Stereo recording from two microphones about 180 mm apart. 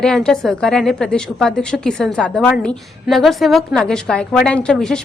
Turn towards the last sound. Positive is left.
turn(degrees=5)  # may be behind; listen again after turning